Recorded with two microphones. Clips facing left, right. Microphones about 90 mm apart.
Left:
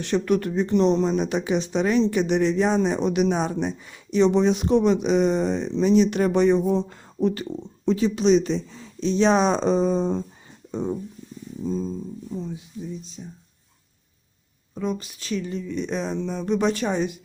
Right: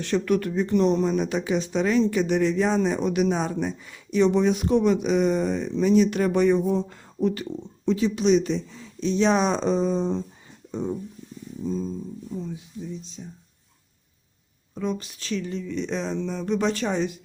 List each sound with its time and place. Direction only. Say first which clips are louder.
0.0 s speech: left 1 dB; 20° left (ahead or behind); by 10.2 s 45° left (ahead or behind)
10.7 s speech: left 2 dB; 30° left (ahead or behind)
14.8 s speech: left 1 dB; 10° left (ahead or behind)